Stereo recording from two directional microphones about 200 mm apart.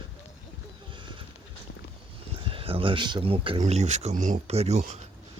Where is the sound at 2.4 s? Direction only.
25° right (ahead or behind).